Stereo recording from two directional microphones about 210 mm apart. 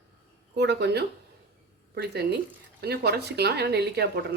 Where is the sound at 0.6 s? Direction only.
55° right (ahead or behind).